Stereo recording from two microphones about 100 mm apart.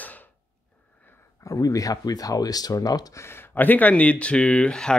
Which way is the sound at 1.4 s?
35° left (ahead or behind).